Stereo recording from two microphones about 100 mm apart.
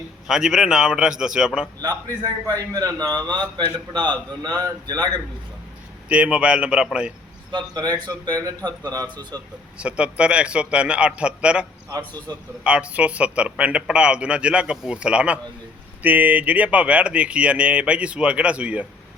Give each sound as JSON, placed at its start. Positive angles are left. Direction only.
{"t": 0.3, "sound": "speech", "side_deg": -5}
{"t": 1.8, "sound": "a man's voice", "side_deg": -40}
{"t": 4.4, "sound": "a man's voice", "side_deg": -40}
{"t": 6.1, "sound": "speech", "side_deg": -10}
{"t": 7.5, "sound": "a man's voice", "side_deg": -45}
{"t": 9.7, "sound": "speech", "side_deg": -10}
{"t": 12.3, "sound": "a man's voice", "side_deg": -40}
{"t": 12.6, "sound": "speech", "side_deg": -10}